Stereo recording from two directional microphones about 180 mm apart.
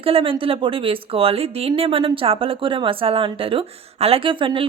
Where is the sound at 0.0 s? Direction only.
30° right (ahead or behind).